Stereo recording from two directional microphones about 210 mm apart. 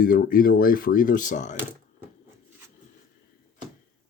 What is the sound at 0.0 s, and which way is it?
Speech, 45° left (ahead or behind).